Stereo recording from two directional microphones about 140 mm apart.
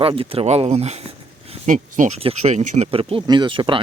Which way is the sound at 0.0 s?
40° right (ahead or behind).